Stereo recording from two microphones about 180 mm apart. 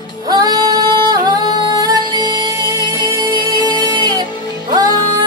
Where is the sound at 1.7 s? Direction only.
20° right (ahead or behind).